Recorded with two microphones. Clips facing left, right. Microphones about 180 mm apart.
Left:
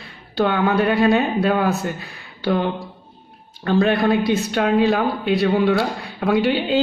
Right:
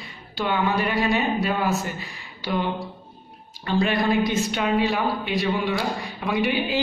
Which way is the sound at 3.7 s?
60° left (ahead or behind).